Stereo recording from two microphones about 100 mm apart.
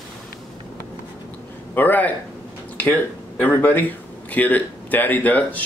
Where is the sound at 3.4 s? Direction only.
15° left (ahead or behind).